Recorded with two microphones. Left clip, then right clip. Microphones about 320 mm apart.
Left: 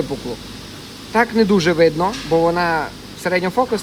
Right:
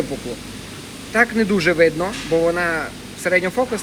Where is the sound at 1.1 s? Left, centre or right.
Left.